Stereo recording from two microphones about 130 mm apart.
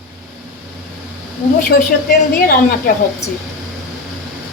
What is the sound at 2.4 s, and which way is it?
Speech, 90° left.